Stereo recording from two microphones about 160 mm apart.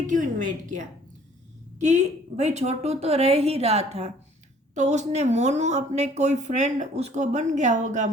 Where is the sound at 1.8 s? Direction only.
45° right (ahead or behind).